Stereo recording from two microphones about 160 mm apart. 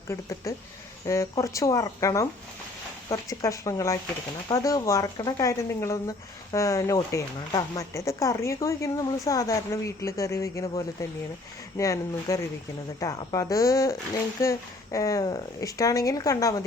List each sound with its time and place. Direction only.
0.1 s speech: 20° left (ahead or behind)